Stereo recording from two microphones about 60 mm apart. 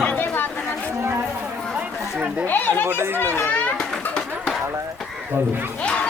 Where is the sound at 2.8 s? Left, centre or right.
Right.